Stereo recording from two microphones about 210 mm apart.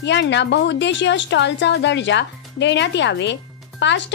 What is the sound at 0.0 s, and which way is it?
A woman's voice, 55° left (ahead or behind).